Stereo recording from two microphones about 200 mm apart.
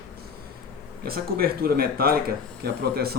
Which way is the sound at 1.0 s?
50° right (ahead or behind).